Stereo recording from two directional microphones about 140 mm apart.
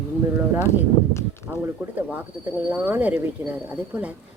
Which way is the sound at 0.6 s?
20° left (ahead or behind).